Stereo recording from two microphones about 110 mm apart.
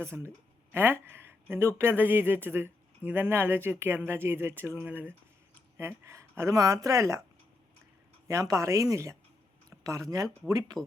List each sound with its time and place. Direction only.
0.0 s speech: 25° right (ahead or behind)
8.3 s speech: 30° right (ahead or behind)